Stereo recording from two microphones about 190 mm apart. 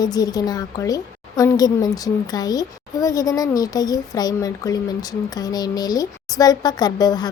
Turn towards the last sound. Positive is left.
turn(degrees=20)  # may be behind; listen again after turning